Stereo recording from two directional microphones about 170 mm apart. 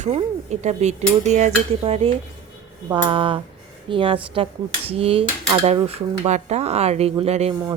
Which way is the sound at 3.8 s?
30° right (ahead or behind).